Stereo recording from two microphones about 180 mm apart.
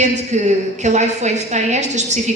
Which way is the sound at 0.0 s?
40° right (ahead or behind).